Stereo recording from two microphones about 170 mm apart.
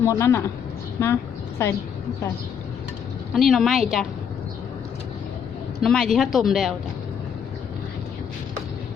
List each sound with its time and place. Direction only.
0.0 s a woman's voice: 15° left (ahead or behind)
0.9 s a sound: 15° left (ahead or behind)
3.3 s speech: centre (ahead or behind)
5.8 s speech: 5° left (ahead or behind)